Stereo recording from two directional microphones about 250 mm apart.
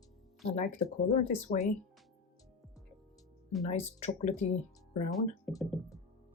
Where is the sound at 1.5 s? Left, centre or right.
Left.